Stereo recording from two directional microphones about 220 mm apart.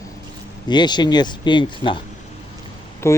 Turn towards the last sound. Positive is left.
turn(degrees=10)  # may be behind; listen again after turning